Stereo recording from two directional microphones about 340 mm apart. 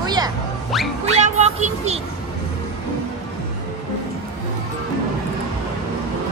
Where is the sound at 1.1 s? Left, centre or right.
Centre.